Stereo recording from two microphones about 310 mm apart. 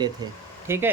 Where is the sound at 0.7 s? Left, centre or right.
Centre.